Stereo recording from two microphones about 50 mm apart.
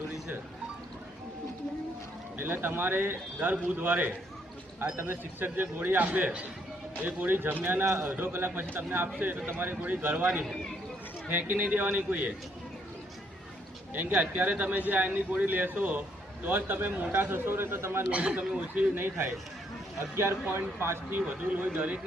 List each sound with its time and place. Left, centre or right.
2.4 s a man's voice: right
7.9 s speech: right
8.1 s a man's voice: right
11.3 s a man's voice: right
13.9 s a man's voice: right
17.7 s speech: right
18.1 s speech: right
20.0 s speech: right
20.4 s speech: right
21.2 s a man's voice: right
21.8 s speech: right